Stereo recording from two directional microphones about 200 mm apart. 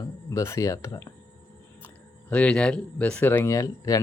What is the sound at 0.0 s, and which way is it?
Speech, 15° left (ahead or behind).